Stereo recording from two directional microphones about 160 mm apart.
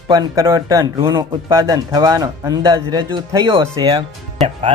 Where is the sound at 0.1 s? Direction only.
25° right (ahead or behind).